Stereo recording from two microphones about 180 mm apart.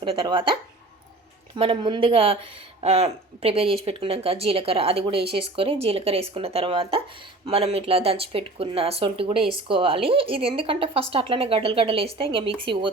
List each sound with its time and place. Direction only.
0.0 s a woman's voice: 30° right (ahead or behind)
1.5 s a woman's voice: 30° right (ahead or behind)